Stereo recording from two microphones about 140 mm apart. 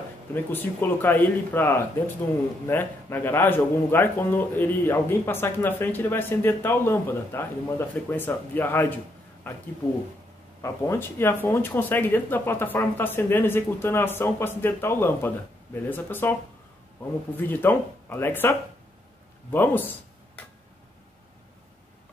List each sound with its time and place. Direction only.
0.3 s speech: 15° left (ahead or behind)
17.4 s speech: 15° left (ahead or behind)